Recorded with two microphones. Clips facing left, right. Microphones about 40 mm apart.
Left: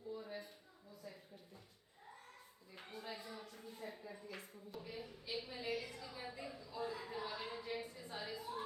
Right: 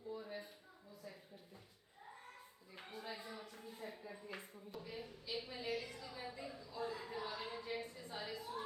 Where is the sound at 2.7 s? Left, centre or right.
Centre.